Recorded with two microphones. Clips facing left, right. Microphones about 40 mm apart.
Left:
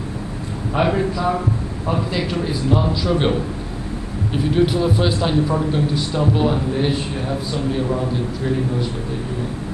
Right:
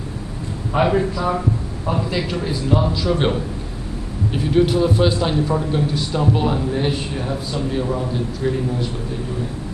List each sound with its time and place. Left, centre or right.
0.7 s a man's voice: centre